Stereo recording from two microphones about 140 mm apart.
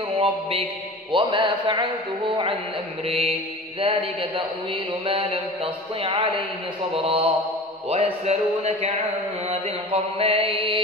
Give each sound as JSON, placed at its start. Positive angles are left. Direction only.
{"t": 0.2, "sound": "mantra", "side_deg": -40}
{"t": 3.1, "sound": "speech", "side_deg": -45}
{"t": 3.8, "sound": "mantra", "side_deg": -40}
{"t": 7.9, "sound": "speech", "side_deg": -50}
{"t": 9.5, "sound": "mantra", "side_deg": -40}